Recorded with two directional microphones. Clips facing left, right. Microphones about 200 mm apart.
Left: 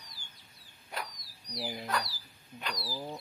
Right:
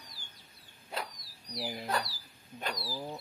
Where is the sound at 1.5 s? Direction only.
Centre (ahead or behind).